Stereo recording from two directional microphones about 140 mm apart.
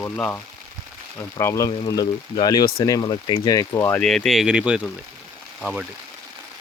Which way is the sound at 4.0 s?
Centre (ahead or behind).